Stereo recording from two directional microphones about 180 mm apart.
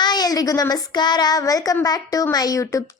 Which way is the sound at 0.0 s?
20° left (ahead or behind).